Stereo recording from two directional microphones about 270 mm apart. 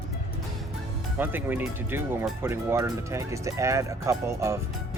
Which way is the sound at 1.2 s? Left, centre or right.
Centre.